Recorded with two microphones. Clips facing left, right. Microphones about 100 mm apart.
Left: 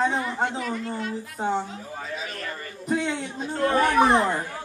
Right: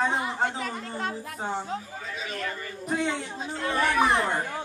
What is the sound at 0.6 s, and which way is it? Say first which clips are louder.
Speech: left 3 dB; 45° right (ahead or behind).